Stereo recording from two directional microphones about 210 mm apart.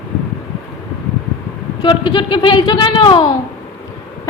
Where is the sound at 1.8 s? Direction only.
20° left (ahead or behind).